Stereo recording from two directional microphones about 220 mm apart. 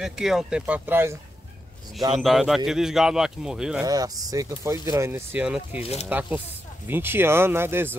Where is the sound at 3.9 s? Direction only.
15° right (ahead or behind).